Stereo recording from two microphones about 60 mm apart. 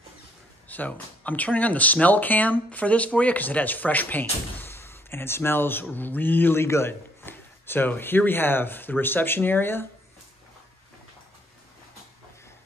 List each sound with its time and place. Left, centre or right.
0.7 s speech: left